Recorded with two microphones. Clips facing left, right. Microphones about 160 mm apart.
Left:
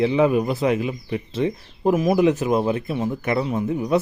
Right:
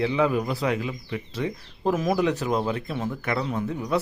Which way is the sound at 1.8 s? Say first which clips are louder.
Left 5 dB; 10° left (ahead or behind).